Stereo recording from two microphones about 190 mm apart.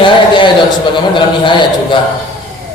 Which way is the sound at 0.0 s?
25° left (ahead or behind).